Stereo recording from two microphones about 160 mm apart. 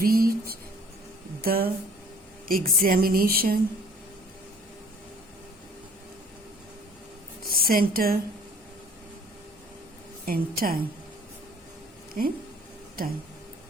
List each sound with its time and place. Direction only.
0.0 s a woman's voice: 65° right (ahead or behind)
7.4 s speech: 65° right (ahead or behind)
10.2 s a woman's voice: 65° right (ahead or behind)
12.2 s a woman's voice: 65° right (ahead or behind)